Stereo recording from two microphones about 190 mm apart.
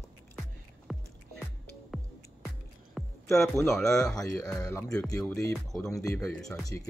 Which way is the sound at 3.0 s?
Centre (ahead or behind).